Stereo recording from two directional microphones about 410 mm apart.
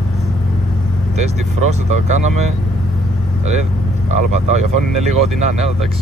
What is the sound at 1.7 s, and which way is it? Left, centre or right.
Speech, centre.